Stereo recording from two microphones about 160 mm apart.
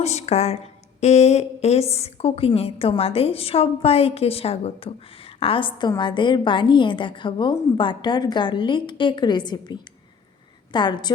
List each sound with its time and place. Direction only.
0.0 s a woman's voice: 45° left (ahead or behind); by 11.1 s 30° left (ahead or behind)